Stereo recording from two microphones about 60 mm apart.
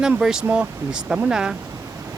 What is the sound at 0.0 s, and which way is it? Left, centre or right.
Speech, centre.